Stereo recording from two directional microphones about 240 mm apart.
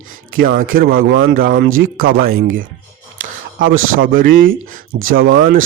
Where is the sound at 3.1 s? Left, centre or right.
Right.